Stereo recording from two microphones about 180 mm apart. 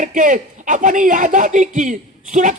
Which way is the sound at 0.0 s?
45° right (ahead or behind).